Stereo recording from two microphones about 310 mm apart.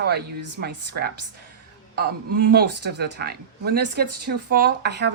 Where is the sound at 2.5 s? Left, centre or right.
Right.